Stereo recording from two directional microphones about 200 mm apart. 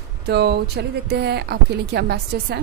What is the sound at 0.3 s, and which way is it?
A woman's voice, 55° right (ahead or behind).